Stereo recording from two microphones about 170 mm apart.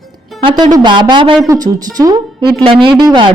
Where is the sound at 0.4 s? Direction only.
25° right (ahead or behind).